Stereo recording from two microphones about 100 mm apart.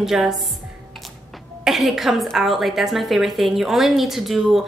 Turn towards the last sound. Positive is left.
turn(degrees=0)  # may be behind; listen again after turning